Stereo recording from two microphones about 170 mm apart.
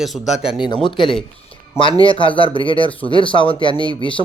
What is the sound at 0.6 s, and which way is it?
Speech, 30° left (ahead or behind).